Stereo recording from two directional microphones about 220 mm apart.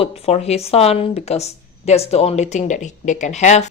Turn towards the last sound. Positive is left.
turn(degrees=30)  # may be behind; listen again after turning